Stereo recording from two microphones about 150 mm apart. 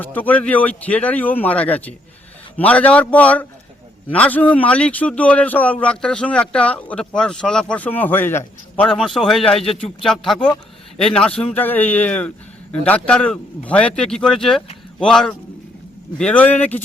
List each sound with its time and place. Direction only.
0.0 s a man's voice: 10° left (ahead or behind)